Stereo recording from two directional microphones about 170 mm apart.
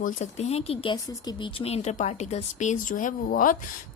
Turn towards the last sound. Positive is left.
turn(degrees=55)  # may be behind; listen again after turning